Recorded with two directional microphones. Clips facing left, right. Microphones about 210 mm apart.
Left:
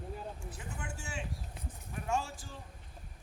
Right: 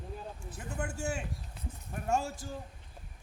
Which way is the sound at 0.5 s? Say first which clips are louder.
Right 6 dB; 45° right (ahead or behind).